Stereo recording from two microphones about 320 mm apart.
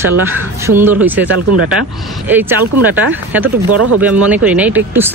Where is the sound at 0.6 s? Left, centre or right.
Centre.